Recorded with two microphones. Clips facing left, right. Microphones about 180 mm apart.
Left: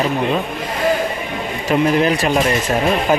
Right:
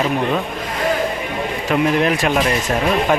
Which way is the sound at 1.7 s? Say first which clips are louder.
Left 2 dB; centre (ahead or behind).